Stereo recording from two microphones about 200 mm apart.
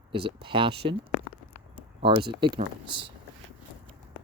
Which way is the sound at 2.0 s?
25° right (ahead or behind).